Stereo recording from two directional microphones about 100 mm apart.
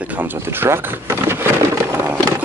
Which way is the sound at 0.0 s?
15° right (ahead or behind).